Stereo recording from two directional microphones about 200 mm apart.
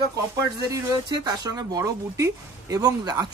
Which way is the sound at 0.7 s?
20° right (ahead or behind).